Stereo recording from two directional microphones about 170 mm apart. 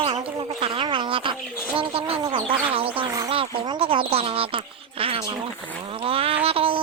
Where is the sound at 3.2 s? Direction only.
30° right (ahead or behind).